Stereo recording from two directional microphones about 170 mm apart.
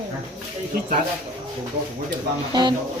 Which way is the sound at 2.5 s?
25° right (ahead or behind).